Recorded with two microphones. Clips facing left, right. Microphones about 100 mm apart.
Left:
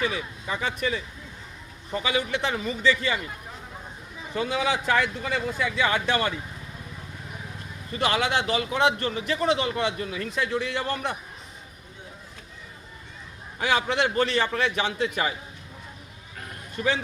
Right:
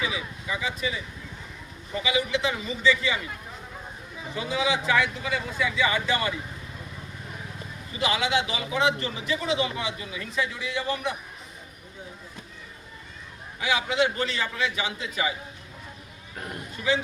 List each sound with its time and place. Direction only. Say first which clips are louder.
0.0 s a man's voice: left 2 dB; 50° left (ahead or behind)
2.0 s a man's voice: even; 50° left (ahead or behind)
4.4 s a man's voice: left 1 dB; 55° left (ahead or behind)
7.9 s a man's voice: left 1 dB; 55° left (ahead or behind)
13.6 s a man's voice: left 1 dB; 50° left (ahead or behind)